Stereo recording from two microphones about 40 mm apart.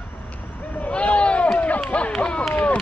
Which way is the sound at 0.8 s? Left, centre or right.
Left.